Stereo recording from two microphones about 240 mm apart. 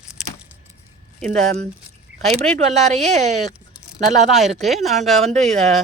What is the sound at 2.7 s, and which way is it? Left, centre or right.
Speech, right.